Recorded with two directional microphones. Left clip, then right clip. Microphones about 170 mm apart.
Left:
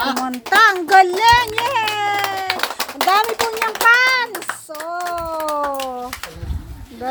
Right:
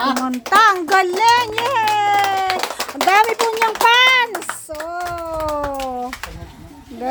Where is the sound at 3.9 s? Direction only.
25° right (ahead or behind).